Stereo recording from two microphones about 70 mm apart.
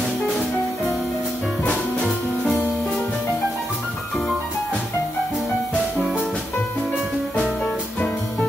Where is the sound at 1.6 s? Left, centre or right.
Centre.